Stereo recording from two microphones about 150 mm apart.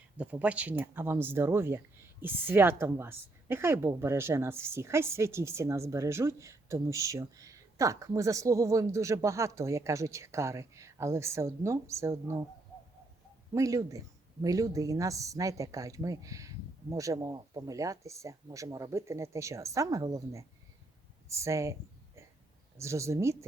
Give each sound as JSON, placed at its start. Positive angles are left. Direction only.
{"t": 0.2, "sound": "a woman's voice", "side_deg": -10}
{"t": 13.5, "sound": "a woman's voice", "side_deg": -20}